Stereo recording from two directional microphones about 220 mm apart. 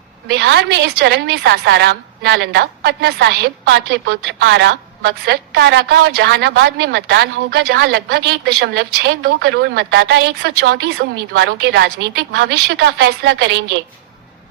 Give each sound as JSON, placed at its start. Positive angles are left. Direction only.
{"t": 0.3, "sound": "a woman's voice", "side_deg": -50}